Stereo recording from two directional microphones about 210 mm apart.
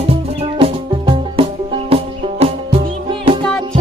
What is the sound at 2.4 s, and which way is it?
Music, 30° right (ahead or behind).